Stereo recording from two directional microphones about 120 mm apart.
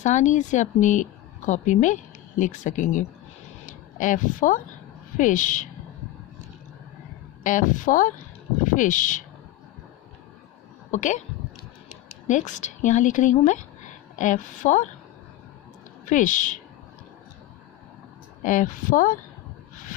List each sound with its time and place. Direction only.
0.0 s speech: 85° left
3.6 s a sound: 90° left
5.1 s a woman's voice: 90° left
7.4 s a woman's voice: 90° left
10.9 s speech: 90° left
12.3 s a woman's voice: 90° left
16.1 s a woman's voice: 90° left
18.4 s a woman's voice: 90° left